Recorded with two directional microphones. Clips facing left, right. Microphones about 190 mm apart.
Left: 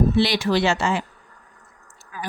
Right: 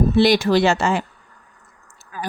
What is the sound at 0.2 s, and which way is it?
Speech, 45° right (ahead or behind).